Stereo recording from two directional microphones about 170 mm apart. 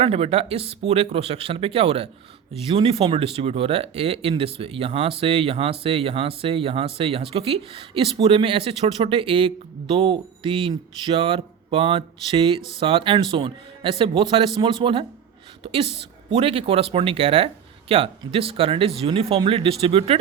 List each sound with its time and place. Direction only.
0.0 s speech: 35° right (ahead or behind)